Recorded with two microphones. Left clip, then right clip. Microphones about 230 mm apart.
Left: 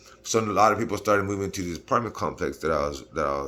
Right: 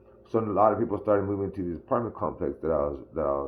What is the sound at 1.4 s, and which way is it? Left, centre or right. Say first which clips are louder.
Speech: left 1 dB; centre.